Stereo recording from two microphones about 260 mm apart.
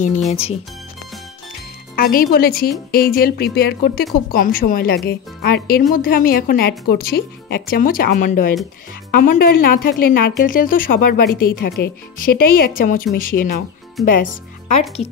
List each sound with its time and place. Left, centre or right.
0.3 s speech: left
2.0 s speech: left